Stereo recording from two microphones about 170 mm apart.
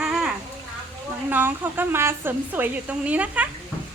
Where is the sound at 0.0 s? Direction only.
Centre (ahead or behind).